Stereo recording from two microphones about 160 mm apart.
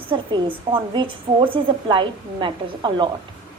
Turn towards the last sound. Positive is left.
turn(degrees=-30)  # may be behind; listen again after turning